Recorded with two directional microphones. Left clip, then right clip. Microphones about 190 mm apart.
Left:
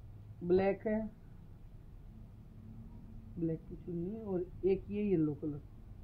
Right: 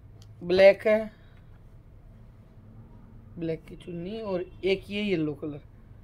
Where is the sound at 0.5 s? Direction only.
25° right (ahead or behind).